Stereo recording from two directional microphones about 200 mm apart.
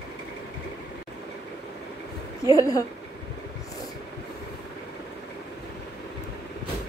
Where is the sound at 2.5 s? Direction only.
15° left (ahead or behind).